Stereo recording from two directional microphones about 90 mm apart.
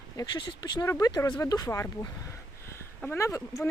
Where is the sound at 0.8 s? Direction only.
40° left (ahead or behind).